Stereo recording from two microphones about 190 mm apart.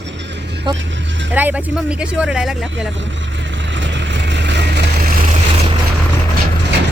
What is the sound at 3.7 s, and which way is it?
Vehicle, 70° right (ahead or behind).